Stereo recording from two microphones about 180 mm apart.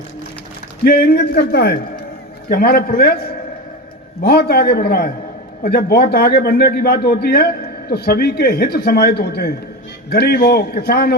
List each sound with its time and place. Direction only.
0.9 s a man's voice: 60° left (ahead or behind)
4.2 s a man's voice: 60° left (ahead or behind)